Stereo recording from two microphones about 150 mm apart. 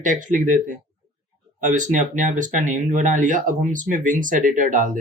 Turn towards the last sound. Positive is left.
turn(degrees=-60)  # may be behind; listen again after turning